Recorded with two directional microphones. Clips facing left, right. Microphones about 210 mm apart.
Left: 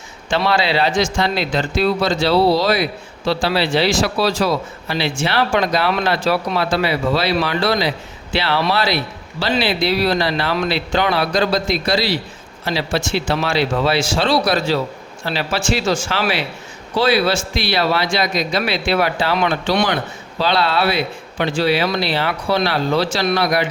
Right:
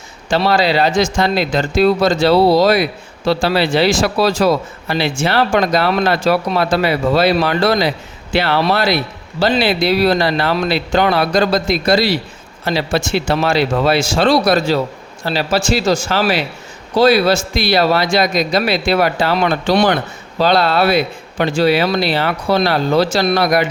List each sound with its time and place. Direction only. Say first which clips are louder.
0.3 s a man's voice: right 3 dB; 40° right (ahead or behind)